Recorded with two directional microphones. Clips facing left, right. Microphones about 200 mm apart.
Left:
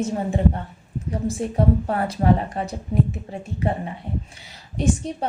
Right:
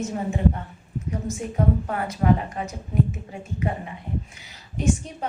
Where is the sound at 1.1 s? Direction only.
30° left (ahead or behind).